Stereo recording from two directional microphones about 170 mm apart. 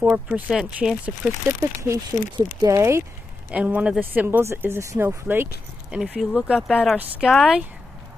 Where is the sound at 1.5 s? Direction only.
15° right (ahead or behind); by 7.7 s centre (ahead or behind).